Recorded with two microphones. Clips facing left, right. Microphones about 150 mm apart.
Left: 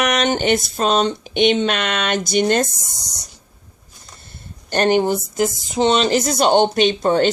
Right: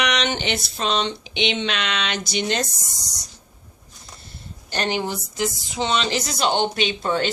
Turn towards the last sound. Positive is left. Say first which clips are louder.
# left 7 dB
turn(degrees=45)  # may be behind; listen again after turning